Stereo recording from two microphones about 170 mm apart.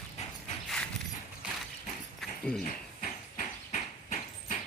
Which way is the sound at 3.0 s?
45° left (ahead or behind).